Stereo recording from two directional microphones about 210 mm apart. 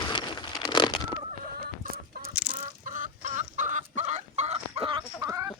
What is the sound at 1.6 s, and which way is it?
Chicken, 45° right (ahead or behind).